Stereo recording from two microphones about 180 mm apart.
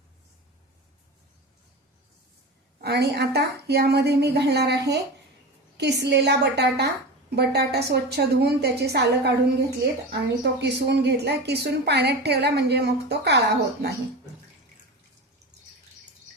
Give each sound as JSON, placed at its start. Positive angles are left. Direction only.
{"t": 2.8, "sound": "a woman's voice", "side_deg": -65}